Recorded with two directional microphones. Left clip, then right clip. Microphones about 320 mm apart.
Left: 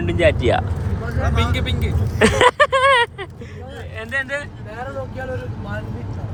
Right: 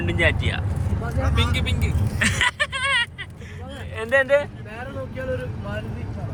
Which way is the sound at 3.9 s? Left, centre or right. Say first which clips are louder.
Right 6 dB; centre.